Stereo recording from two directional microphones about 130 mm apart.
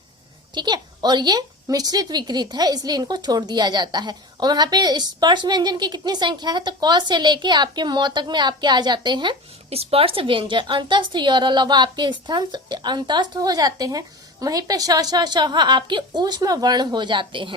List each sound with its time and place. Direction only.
0.5 s a woman's voice: 35° right (ahead or behind)
9.6 s a woman's voice: 50° right (ahead or behind)